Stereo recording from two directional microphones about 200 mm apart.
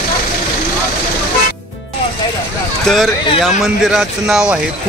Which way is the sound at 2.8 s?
Centre (ahead or behind).